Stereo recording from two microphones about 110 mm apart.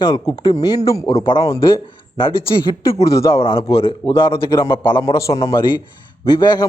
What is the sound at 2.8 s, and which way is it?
Speech, 30° left (ahead or behind).